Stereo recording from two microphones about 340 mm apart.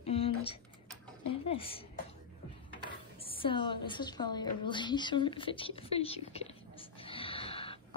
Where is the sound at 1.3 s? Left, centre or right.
Centre.